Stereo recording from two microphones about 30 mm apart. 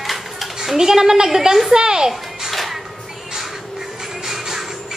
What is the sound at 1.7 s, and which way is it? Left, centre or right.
Music, right.